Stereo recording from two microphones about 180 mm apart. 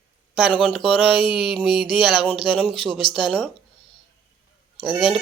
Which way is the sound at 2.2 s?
Centre (ahead or behind).